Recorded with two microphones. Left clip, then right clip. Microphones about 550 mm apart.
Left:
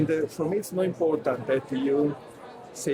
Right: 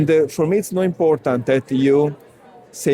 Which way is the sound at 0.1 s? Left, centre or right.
Right.